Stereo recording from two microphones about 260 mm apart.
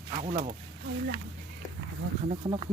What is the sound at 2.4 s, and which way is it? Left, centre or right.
Speech, centre.